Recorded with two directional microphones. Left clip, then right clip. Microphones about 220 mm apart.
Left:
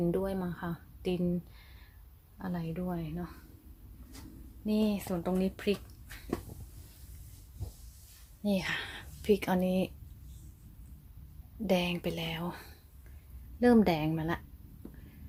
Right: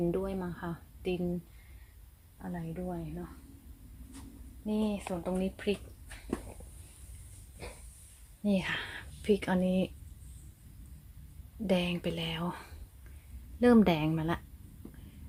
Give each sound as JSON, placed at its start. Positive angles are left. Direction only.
{"t": 0.0, "sound": "a woman's voice", "side_deg": 0}
{"t": 2.4, "sound": "speech", "side_deg": 20}
{"t": 4.6, "sound": "speech", "side_deg": 15}
{"t": 8.4, "sound": "a woman's voice", "side_deg": -5}
{"t": 11.6, "sound": "a woman's voice", "side_deg": 0}